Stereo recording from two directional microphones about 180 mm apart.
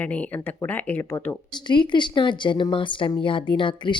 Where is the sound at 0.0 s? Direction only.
10° left (ahead or behind).